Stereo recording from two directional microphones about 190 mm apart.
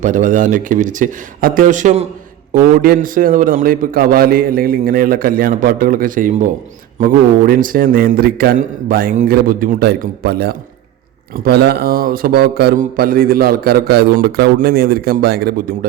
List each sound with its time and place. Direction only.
0.0 s a man's voice: 40° right (ahead or behind)